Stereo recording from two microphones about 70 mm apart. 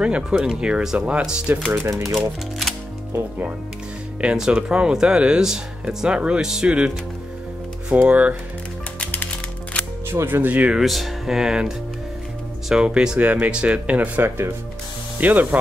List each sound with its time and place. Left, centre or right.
0.0 s speech: centre
1.7 s speech: right
4.2 s speech: centre
8.1 s speech: centre
9.0 s music: left
10.0 s speech: right
10.8 s speech: centre; by 14.5 s right
15.1 s speech: right